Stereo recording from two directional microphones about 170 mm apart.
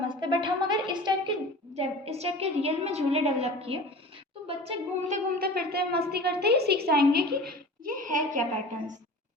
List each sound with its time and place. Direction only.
0.1 s a woman's voice: 25° right (ahead or behind)
1.7 s a woman's voice: 35° right (ahead or behind)
5.5 s a woman's voice: 65° right (ahead or behind); by 8.4 s 50° right (ahead or behind)